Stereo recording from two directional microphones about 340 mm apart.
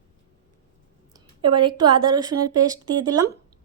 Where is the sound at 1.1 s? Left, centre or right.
Centre.